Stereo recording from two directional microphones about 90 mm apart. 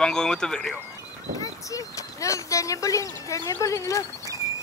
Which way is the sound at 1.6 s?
40° left (ahead or behind).